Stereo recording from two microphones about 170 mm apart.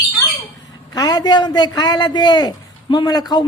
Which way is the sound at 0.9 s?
25° left (ahead or behind).